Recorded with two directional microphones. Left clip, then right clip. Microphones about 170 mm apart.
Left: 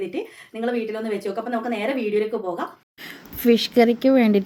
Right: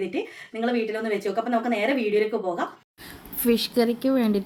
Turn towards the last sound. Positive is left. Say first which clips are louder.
# left 6 dB
turn(degrees=5)  # may be behind; listen again after turning